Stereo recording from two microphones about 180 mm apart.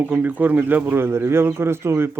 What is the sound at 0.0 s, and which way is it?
Speech, 10° right (ahead or behind).